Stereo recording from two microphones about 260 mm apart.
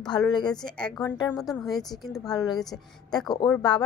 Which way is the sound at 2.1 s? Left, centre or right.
Centre.